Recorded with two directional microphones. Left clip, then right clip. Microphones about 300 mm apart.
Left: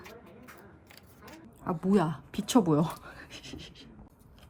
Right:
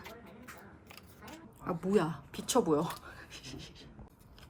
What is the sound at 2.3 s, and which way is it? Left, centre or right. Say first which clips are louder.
Scratch: left 3 dB; left.